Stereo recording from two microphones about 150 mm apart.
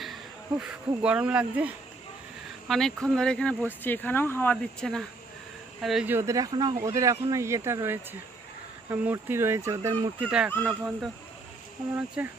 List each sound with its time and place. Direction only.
0.6 s speech: 5° right (ahead or behind)
2.6 s speech: 5° left (ahead or behind)
6.1 s speech: 20° right (ahead or behind)
10.2 s speech: 5° right (ahead or behind)